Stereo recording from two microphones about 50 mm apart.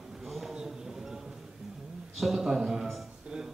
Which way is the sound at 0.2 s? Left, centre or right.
Centre.